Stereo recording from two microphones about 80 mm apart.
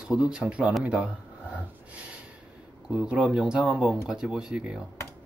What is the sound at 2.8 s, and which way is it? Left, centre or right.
Speech, centre.